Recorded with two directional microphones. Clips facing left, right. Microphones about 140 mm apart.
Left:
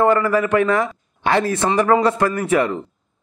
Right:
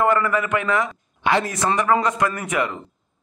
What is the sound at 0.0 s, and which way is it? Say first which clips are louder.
A man's voice: left 4 dB; 30° left (ahead or behind).